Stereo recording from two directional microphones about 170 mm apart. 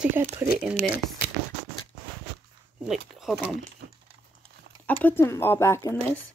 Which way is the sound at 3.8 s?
80° right.